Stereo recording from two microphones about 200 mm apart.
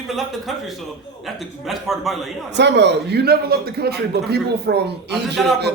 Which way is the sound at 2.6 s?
60° right (ahead or behind).